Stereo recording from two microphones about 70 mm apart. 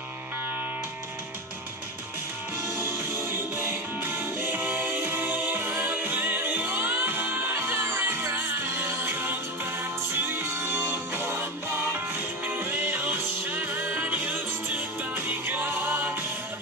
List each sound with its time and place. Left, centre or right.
2.8 s music: right
12.4 s music: right